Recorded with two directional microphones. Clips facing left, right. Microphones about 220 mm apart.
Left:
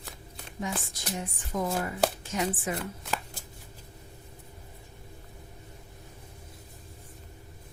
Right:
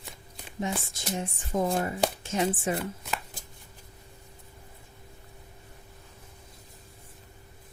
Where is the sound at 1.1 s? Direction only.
25° right (ahead or behind).